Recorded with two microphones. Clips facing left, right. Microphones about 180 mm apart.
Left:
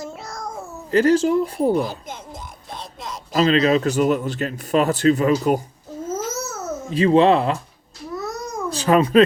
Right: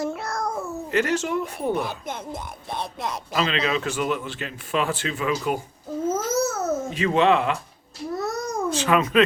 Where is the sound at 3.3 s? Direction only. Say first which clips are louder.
Left 8 dB; 40° left (ahead or behind).